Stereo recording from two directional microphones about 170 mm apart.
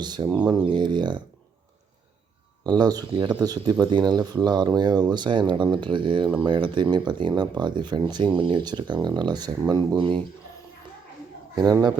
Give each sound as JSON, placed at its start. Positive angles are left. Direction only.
{"t": 0.0, "sound": "speech", "side_deg": -25}
{"t": 2.6, "sound": "speech", "side_deg": -25}
{"t": 11.5, "sound": "speech", "side_deg": -25}